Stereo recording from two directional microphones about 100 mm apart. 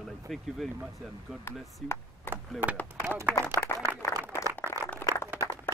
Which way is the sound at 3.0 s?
20° right (ahead or behind).